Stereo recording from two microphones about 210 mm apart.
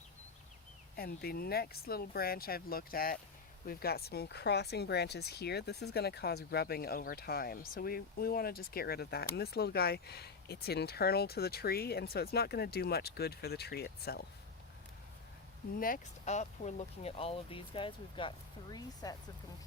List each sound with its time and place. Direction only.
0.9 s speech: 45° left (ahead or behind)
15.8 s speech: 35° left (ahead or behind); by 19.1 s 20° left (ahead or behind)